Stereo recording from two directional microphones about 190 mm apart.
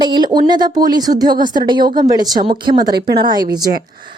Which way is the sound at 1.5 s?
20° right (ahead or behind).